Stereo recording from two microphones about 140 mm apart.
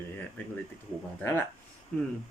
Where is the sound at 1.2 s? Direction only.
15° left (ahead or behind).